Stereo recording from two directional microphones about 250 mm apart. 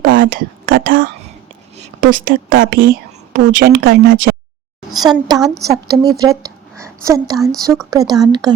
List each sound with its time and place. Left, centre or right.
0.0 s a woman's voice: right
4.9 s a woman's voice: centre